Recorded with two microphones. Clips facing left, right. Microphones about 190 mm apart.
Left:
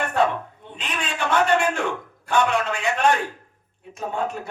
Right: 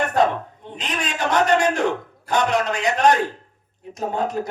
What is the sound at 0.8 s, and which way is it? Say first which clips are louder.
A man's voice: right 3 dB; 40° right (ahead or behind).